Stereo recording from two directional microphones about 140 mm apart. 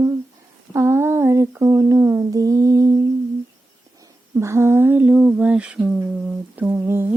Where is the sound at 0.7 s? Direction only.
15° right (ahead or behind).